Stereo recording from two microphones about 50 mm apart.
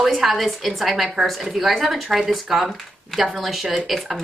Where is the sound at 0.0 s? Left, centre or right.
Centre.